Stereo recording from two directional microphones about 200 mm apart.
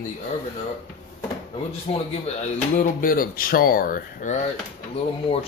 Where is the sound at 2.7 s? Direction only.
45° left (ahead or behind).